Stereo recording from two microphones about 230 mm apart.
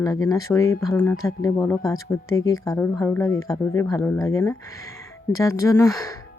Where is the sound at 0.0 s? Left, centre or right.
Centre.